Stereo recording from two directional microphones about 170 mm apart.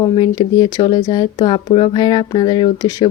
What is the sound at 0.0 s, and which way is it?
Speech, 25° left (ahead or behind).